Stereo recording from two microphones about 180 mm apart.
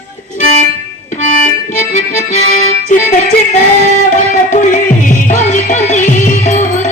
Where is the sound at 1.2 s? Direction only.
45° left (ahead or behind).